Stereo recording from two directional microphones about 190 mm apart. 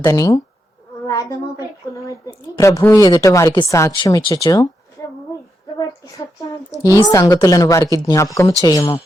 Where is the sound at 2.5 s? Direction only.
15° left (ahead or behind).